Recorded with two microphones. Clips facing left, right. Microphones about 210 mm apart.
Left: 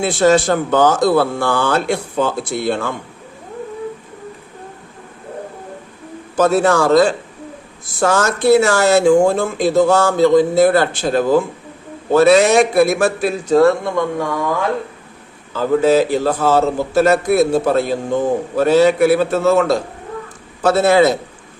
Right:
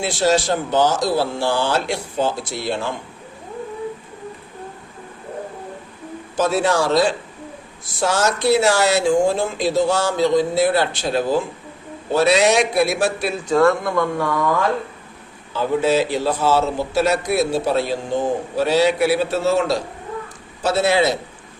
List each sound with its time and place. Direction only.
0.0 s speech: 55° left (ahead or behind)
6.3 s a man's voice: 50° left (ahead or behind); by 13.9 s 35° left (ahead or behind)
13.9 s speech: 15° left (ahead or behind)
15.5 s a man's voice: 45° left (ahead or behind)